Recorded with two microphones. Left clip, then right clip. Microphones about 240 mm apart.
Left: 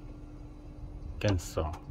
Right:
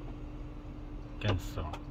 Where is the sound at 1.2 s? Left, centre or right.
Centre.